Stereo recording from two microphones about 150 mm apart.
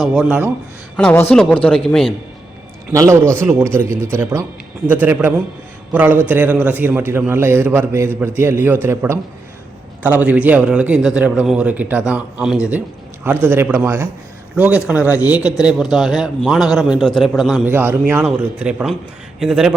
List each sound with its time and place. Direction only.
0.0 s a man's voice: centre (ahead or behind)
0.9 s a man's voice: 10° left (ahead or behind)
2.9 s a man's voice: 20° right (ahead or behind); by 17.6 s centre (ahead or behind)
17.7 s a man's voice: 15° right (ahead or behind)